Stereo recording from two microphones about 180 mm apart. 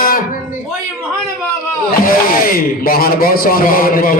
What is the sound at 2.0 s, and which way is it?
Speech, 55° left (ahead or behind).